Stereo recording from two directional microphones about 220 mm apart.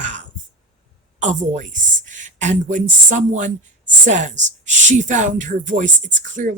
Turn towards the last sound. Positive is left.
turn(degrees=-35)  # may be behind; listen again after turning